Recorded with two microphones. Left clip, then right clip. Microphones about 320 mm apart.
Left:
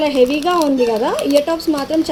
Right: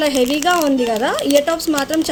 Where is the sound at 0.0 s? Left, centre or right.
Right.